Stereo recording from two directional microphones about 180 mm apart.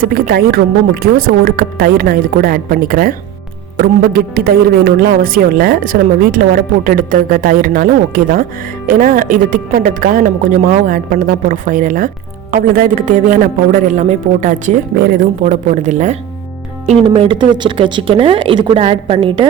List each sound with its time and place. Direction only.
0.0 s a woman's voice: 60° right (ahead or behind); by 19.5 s 30° right (ahead or behind)